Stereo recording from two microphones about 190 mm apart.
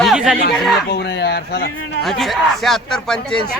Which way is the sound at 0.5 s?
Centre (ahead or behind).